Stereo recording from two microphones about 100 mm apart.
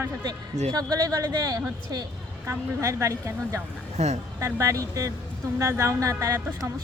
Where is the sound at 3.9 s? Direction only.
90° right.